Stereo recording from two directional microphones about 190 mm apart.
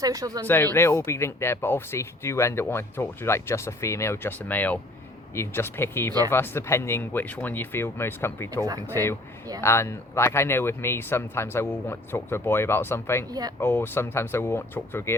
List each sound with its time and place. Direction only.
0.0 s speech: 20° right (ahead or behind)
0.4 s speech: 10° left (ahead or behind)